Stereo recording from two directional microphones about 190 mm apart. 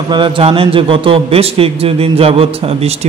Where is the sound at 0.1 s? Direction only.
25° right (ahead or behind).